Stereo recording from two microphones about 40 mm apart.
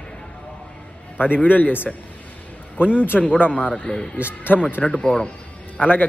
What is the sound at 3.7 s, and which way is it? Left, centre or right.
Speech, centre.